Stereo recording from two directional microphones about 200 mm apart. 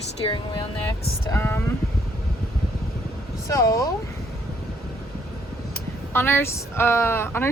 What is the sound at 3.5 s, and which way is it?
Speech, 15° left (ahead or behind).